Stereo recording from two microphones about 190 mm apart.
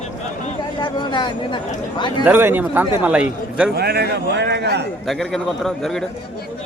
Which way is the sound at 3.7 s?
55° right (ahead or behind).